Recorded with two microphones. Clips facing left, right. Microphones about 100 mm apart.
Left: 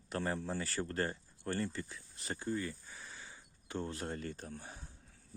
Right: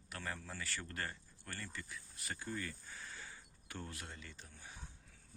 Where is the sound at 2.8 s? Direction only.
15° left (ahead or behind).